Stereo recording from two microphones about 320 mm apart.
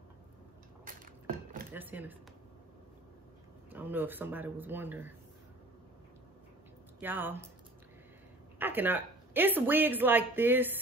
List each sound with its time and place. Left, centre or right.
0.9 s a sound: right
1.7 s speech: centre
3.7 s speech: centre
7.0 s speech: centre
8.5 s speech: centre